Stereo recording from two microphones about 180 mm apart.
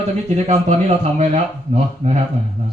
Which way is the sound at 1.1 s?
40° right (ahead or behind).